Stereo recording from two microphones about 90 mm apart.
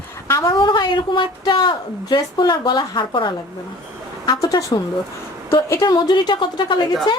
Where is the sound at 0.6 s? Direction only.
60° left (ahead or behind).